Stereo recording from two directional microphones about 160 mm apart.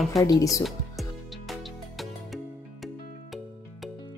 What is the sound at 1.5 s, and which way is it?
Music, centre (ahead or behind).